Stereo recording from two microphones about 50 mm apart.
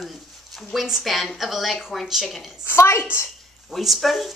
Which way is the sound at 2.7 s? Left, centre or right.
Left.